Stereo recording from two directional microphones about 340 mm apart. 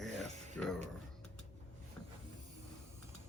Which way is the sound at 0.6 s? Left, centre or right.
Centre.